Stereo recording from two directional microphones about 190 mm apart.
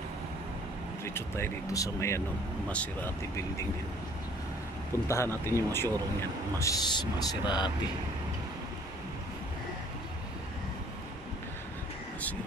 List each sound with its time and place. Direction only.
1.0 s speech: 15° left (ahead or behind)
5.0 s speech: 15° left (ahead or behind)